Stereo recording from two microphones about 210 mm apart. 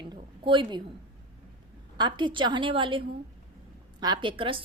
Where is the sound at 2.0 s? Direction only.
20° right (ahead or behind).